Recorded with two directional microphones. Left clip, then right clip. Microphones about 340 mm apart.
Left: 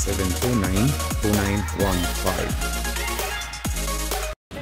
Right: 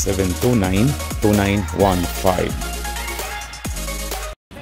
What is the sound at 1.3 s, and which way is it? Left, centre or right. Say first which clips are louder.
Speech: right 5 dB; centre.